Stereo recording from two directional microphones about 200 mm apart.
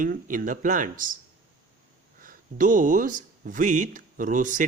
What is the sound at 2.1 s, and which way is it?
Speech, 40° right (ahead or behind).